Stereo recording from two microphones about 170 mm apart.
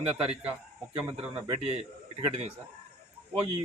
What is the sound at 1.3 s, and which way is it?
A man's voice, 30° right (ahead or behind).